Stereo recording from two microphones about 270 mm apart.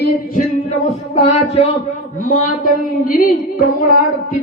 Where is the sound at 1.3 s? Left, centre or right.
Left.